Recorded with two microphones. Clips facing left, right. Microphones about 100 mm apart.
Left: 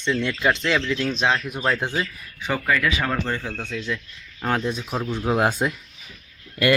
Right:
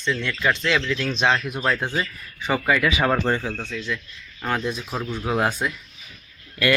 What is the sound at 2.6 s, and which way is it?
Speech, 10° right (ahead or behind).